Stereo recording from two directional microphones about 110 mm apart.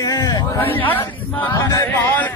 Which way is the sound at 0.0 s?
30° left (ahead or behind).